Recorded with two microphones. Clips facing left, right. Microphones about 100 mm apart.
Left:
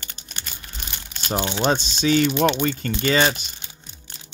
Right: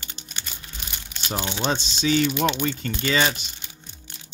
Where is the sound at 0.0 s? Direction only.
45° left (ahead or behind).